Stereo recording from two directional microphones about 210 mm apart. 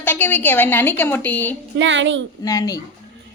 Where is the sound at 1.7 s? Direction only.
60° right (ahead or behind).